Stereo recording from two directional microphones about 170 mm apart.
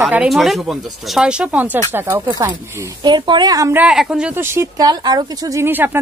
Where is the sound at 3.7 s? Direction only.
5° right (ahead or behind).